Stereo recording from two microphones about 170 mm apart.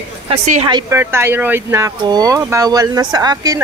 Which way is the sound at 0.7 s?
25° right (ahead or behind).